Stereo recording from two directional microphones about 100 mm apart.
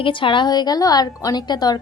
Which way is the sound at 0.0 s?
60° left (ahead or behind).